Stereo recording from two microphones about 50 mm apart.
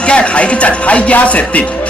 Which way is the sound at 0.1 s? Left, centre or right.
Left.